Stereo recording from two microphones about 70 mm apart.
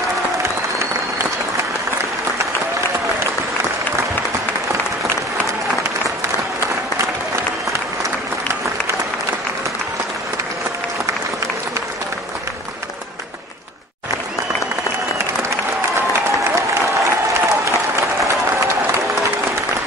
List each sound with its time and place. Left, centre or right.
0.4 s applause: right
16.1 s applause: right